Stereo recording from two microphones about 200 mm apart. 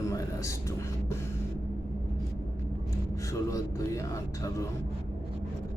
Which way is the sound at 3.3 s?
15° left (ahead or behind).